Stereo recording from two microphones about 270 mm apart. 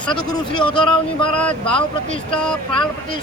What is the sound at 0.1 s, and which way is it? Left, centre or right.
Speech, centre.